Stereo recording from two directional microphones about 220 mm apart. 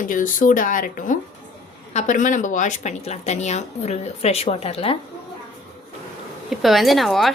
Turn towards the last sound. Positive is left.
turn(degrees=0)  # may be behind; listen again after turning